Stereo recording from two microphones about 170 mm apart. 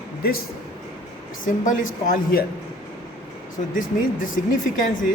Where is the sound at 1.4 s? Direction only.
50° left (ahead or behind).